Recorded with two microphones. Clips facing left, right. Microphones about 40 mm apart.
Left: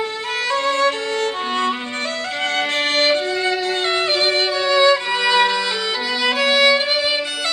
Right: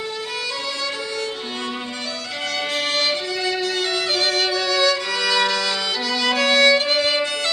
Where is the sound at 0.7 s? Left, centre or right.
Left.